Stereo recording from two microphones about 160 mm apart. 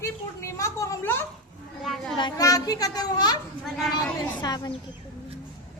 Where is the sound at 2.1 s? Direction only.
25° left (ahead or behind).